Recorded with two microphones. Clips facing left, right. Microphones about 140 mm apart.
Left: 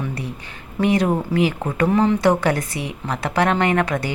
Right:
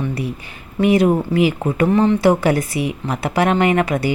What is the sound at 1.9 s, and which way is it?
A woman's voice, 5° left (ahead or behind).